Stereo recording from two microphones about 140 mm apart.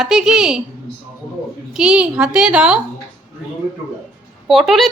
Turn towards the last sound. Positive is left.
turn(degrees=0)  # may be behind; listen again after turning